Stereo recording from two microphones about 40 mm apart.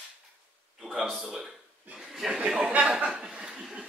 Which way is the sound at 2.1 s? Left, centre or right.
Centre.